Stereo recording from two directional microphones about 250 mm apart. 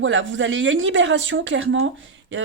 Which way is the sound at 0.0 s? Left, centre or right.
Right.